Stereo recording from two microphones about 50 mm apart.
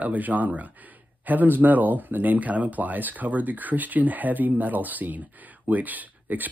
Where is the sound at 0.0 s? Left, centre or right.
Right.